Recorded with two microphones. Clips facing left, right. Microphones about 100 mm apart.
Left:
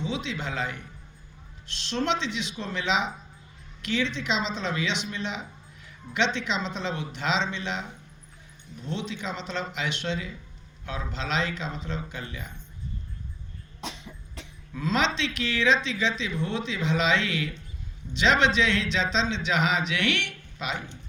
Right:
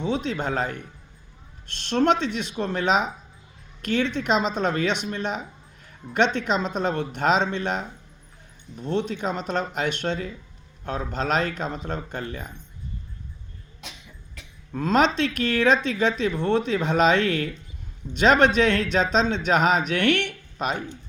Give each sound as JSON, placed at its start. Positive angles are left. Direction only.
{"t": 0.0, "sound": "speech", "side_deg": -45}
{"t": 14.7, "sound": "speech", "side_deg": -45}